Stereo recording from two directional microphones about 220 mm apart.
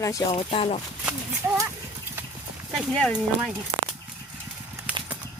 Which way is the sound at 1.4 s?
10° right (ahead or behind).